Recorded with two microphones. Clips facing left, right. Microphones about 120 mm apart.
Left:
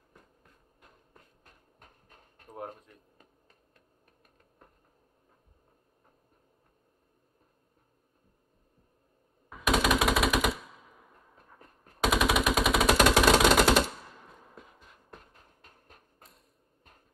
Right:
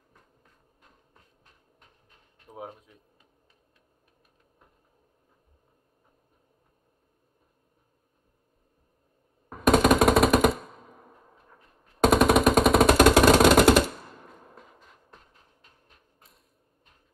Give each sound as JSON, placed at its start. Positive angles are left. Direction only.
{"t": 1.4, "sound": "a sound", "side_deg": 45}
{"t": 9.5, "sound": "machine gun", "side_deg": -45}
{"t": 11.6, "sound": "machine gun", "side_deg": 45}
{"t": 12.0, "sound": "jackhammer", "side_deg": -45}